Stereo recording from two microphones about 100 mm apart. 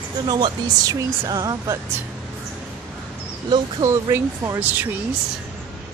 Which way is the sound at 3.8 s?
30° right (ahead or behind).